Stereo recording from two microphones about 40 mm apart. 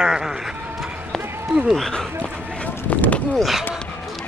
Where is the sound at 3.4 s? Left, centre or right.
Centre.